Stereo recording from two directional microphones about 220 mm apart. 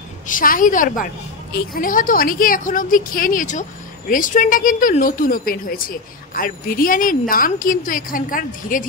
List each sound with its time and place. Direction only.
0.3 s speech: 40° left (ahead or behind)